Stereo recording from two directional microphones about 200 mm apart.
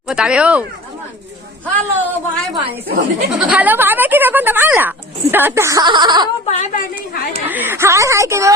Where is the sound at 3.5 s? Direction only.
10° right (ahead or behind).